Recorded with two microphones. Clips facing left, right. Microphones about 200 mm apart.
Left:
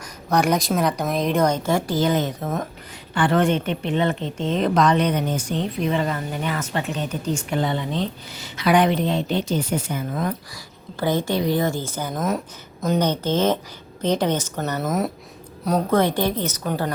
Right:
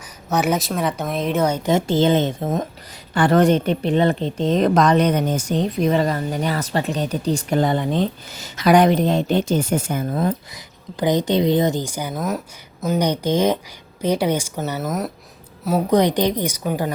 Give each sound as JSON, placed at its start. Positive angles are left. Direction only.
{"t": 0.0, "sound": "a woman's voice", "side_deg": -5}
{"t": 1.7, "sound": "a woman's voice", "side_deg": -25}
{"t": 3.2, "sound": "a woman's voice", "side_deg": -40}
{"t": 10.2, "sound": "a woman's voice", "side_deg": -25}
{"t": 12.1, "sound": "a woman's voice", "side_deg": 0}
{"t": 15.9, "sound": "a woman's voice", "side_deg": -15}